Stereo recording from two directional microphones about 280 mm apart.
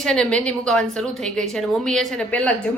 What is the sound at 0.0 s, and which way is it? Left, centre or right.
Speech, centre.